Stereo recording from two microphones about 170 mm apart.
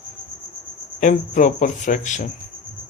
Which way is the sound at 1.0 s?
50° left (ahead or behind).